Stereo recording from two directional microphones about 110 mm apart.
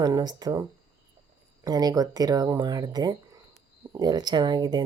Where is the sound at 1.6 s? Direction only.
35° right (ahead or behind).